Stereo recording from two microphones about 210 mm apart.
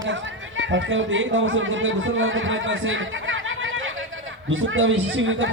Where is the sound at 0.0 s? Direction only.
65° right (ahead or behind).